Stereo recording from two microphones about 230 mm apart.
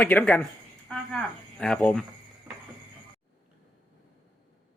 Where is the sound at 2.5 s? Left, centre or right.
Centre.